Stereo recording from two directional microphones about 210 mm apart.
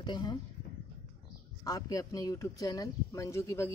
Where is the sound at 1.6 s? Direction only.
15° left (ahead or behind).